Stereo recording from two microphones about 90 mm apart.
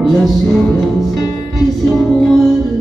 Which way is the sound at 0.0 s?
Centre (ahead or behind).